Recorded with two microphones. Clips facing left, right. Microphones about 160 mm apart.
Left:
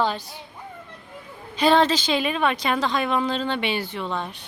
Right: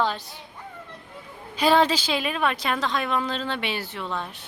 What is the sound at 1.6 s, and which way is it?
Speech, 5° right (ahead or behind).